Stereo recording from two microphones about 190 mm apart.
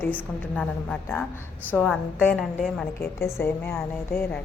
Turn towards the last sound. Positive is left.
turn(degrees=10)  # may be behind; listen again after turning